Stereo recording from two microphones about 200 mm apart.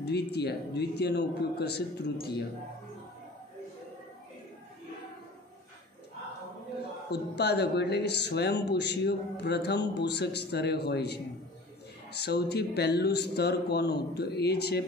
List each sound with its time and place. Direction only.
0.0 s speech: 55° left (ahead or behind)
7.1 s speech: 55° left (ahead or behind)
12.2 s speech: 55° left (ahead or behind)